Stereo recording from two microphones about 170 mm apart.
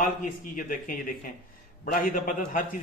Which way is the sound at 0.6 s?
55° left (ahead or behind).